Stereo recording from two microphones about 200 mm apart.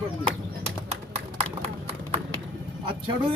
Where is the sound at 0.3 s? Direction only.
30° right (ahead or behind).